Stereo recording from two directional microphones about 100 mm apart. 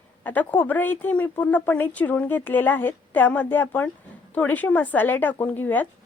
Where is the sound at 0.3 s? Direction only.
15° left (ahead or behind).